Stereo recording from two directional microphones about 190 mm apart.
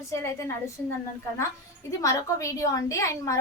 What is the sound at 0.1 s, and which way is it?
Speech, 15° left (ahead or behind).